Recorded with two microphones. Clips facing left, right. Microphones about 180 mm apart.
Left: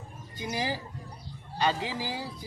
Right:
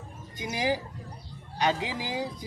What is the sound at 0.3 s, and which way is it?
Speech, 15° right (ahead or behind).